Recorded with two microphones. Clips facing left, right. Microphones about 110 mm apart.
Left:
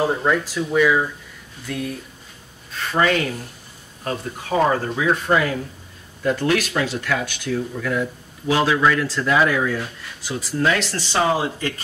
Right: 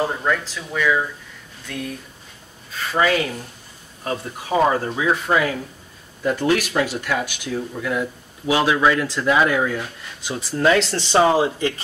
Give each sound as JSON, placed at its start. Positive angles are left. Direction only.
{"t": 0.0, "sound": "speech", "side_deg": 10}
{"t": 2.7, "sound": "speech", "side_deg": 0}